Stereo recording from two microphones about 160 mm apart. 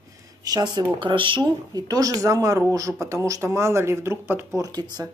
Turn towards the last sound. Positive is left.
turn(degrees=-25)  # may be behind; listen again after turning